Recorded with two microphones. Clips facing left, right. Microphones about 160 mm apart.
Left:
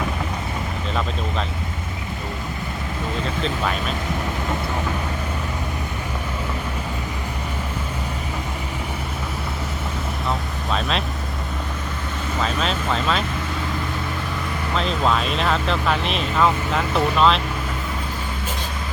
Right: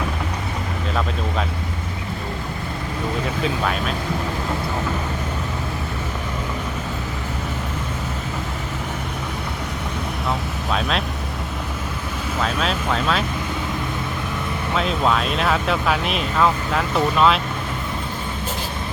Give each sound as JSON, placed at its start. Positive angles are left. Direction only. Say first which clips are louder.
{"t": 3.4, "sound": "speech", "louder": "right 1 dB", "side_deg": 0}
{"t": 10.2, "sound": "vehicle", "louder": "right 1 dB", "side_deg": 0}
{"t": 12.4, "sound": "speech", "louder": "right 1 dB", "side_deg": 0}
{"t": 14.7, "sound": "speech", "louder": "right 1 dB", "side_deg": -5}